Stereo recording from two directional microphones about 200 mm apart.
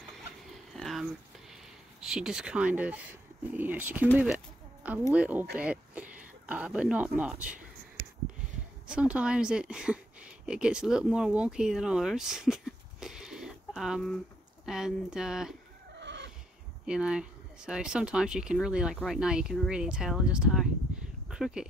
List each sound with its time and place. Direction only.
0.7 s a sound: centre (ahead or behind)
3.5 s speech: 10° right (ahead or behind)
5.1 s speech: 5° right (ahead or behind)
8.8 s speech: 5° right (ahead or behind)
16.0 s neigh: 60° right (ahead or behind)
16.8 s speech: 5° right (ahead or behind)